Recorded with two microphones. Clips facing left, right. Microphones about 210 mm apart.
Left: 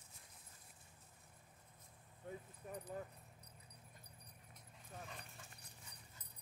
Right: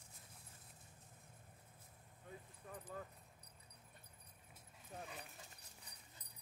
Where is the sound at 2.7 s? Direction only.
15° left (ahead or behind).